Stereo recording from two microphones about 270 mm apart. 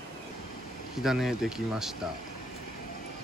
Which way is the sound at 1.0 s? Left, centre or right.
Centre.